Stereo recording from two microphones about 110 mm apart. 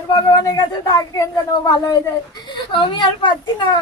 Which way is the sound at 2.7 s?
50° left (ahead or behind).